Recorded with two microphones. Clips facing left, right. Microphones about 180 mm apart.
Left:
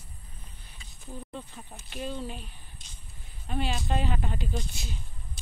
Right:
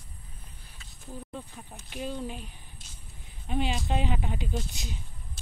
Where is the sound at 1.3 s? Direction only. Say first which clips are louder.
Even; centre (ahead or behind).